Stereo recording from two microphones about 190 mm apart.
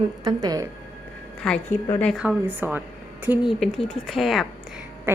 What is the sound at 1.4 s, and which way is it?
Speech, 10° left (ahead or behind).